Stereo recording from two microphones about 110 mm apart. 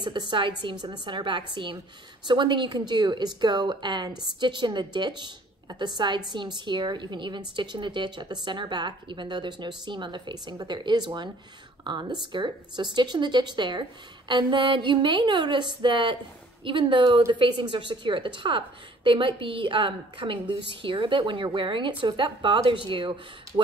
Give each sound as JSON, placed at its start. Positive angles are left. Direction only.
{"t": 0.3, "sound": "a woman's voice", "side_deg": -45}